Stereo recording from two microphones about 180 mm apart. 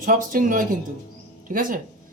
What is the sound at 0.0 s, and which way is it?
Speech, 50° right (ahead or behind).